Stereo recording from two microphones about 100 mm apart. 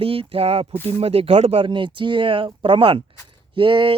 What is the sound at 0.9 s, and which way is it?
Speech, 85° right.